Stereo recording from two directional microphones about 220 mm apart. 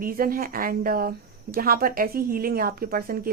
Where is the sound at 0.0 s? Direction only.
40° right (ahead or behind).